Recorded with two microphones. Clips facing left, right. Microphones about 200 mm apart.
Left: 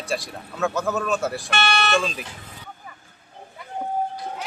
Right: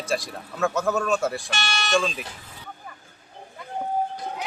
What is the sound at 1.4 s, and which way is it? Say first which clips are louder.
Speech: left 5 dB; 60° left (ahead or behind).